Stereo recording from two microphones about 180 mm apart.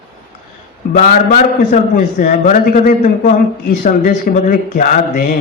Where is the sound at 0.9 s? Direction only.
45° left (ahead or behind).